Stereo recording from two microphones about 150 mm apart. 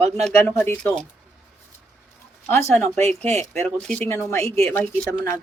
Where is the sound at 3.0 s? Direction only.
45° right (ahead or behind).